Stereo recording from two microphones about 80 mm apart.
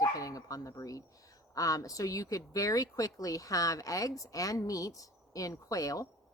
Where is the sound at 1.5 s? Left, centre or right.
Left.